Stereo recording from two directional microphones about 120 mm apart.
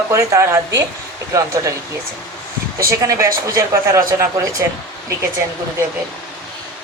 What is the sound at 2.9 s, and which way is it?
Speech, 25° right (ahead or behind).